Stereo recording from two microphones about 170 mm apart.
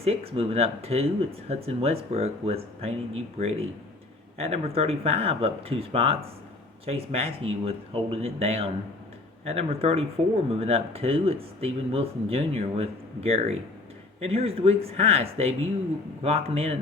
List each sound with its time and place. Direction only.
0.0 s speech: 35° right (ahead or behind)